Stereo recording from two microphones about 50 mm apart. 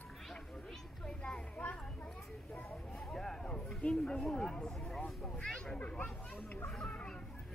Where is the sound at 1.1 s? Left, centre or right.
Centre.